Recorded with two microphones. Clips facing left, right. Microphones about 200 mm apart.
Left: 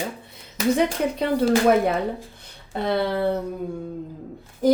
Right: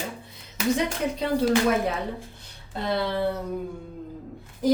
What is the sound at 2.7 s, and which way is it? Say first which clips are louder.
Speech: left 3 dB; 55° left (ahead or behind).